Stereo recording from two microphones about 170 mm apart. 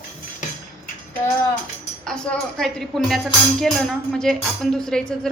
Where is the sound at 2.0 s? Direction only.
5° left (ahead or behind).